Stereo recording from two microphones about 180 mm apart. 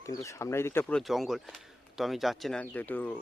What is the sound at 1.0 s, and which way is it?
Speech, centre (ahead or behind).